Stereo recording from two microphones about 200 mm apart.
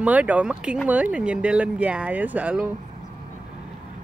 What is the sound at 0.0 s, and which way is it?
Speech, 5° right (ahead or behind).